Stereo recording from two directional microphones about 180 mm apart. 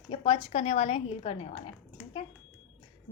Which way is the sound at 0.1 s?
30° left (ahead or behind).